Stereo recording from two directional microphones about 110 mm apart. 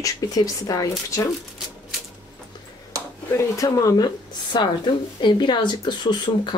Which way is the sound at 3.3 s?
25° left (ahead or behind).